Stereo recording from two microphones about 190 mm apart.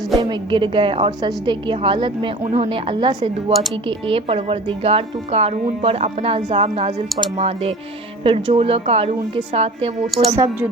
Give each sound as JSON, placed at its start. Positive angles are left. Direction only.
{"t": 0.2, "sound": "a woman's voice", "side_deg": -25}